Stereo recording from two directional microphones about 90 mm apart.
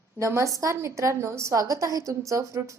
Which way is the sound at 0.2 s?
30° right (ahead or behind).